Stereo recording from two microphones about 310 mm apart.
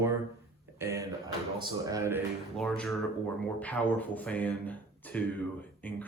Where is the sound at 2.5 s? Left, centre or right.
Centre.